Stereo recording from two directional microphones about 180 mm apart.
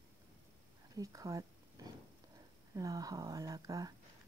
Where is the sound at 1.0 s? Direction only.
20° right (ahead or behind).